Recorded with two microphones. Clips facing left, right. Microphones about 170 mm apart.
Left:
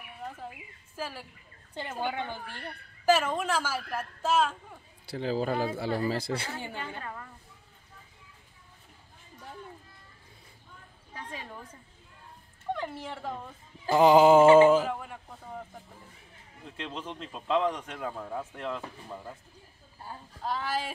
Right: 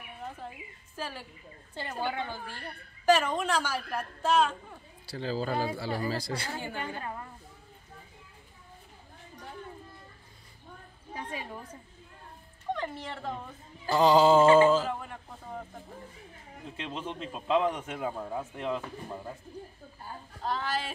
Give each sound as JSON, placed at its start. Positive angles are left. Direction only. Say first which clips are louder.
{"t": 0.9, "sound": "speech", "louder": "left 1 dB", "side_deg": 5}
{"t": 2.0, "sound": "a woman's voice", "louder": "even", "side_deg": 15}
{"t": 3.1, "sound": "a man's voice", "louder": "even", "side_deg": 5}
{"t": 5.1, "sound": "a woman's voice", "louder": "left 2 dB", "side_deg": 15}
{"t": 5.8, "sound": "a sound", "louder": "left 3 dB", "side_deg": 20}
{"t": 6.8, "sound": "a woman's voice", "louder": "right 2 dB", "side_deg": -20}
{"t": 11.1, "sound": "a sound", "louder": "right 3 dB", "side_deg": -10}
{"t": 12.7, "sound": "speech", "louder": "even", "side_deg": 10}
{"t": 13.8, "sound": "a sound", "louder": "left 3 dB", "side_deg": 20}
{"t": 15.0, "sound": "a sound", "louder": "even", "side_deg": 5}
{"t": 16.7, "sound": "a man's voice", "louder": "right 1 dB", "side_deg": -5}
{"t": 20.4, "sound": "a woman's voice", "louder": "even", "side_deg": 10}